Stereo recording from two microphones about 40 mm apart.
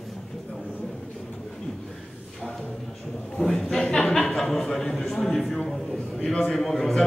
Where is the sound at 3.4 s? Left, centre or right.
Left.